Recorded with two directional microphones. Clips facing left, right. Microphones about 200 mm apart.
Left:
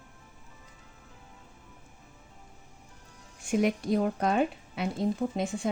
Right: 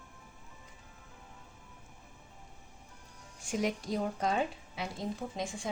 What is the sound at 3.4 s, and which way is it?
A woman's voice, 60° left (ahead or behind).